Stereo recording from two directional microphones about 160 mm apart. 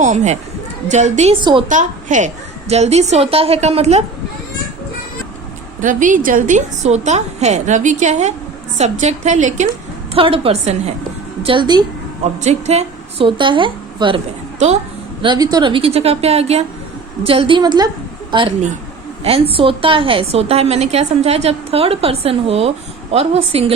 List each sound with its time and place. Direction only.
0.0 s a woman's voice: 45° right (ahead or behind)
1.4 s a woman's voice: 30° right (ahead or behind)
1.7 s a woman's voice: 50° right (ahead or behind)
5.8 s a woman's voice: 55° right (ahead or behind)
10.2 s a woman's voice: 35° right (ahead or behind)
11.4 s a woman's voice: 30° right (ahead or behind)
12.2 s a woman's voice: 45° right (ahead or behind)
15.2 s a woman's voice: 25° right (ahead or behind)